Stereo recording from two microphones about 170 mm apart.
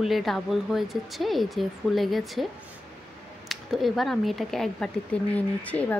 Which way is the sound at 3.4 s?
Centre (ahead or behind).